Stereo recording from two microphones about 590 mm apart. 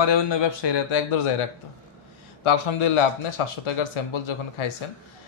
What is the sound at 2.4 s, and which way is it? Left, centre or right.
A man's voice, left.